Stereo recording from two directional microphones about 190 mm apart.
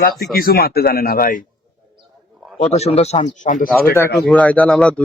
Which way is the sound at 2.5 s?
35° left (ahead or behind).